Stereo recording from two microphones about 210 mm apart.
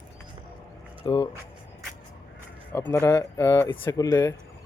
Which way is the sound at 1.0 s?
20° left (ahead or behind).